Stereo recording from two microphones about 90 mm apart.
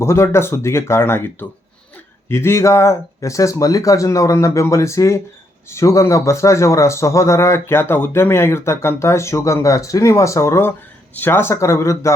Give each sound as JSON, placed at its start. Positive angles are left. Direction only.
{"t": 0.0, "sound": "a man's voice", "side_deg": 30}